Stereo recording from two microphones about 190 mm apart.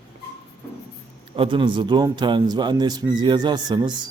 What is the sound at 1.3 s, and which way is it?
A man's voice, 25° right (ahead or behind).